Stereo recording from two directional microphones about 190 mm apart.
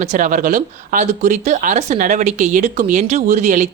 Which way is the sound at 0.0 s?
40° right (ahead or behind).